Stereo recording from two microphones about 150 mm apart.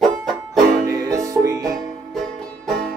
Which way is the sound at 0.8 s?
20° right (ahead or behind).